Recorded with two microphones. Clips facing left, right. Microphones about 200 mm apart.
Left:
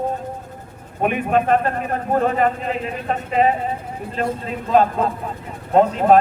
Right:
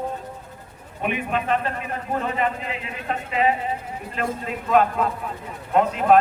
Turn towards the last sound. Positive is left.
turn(degrees=35)  # may be behind; listen again after turning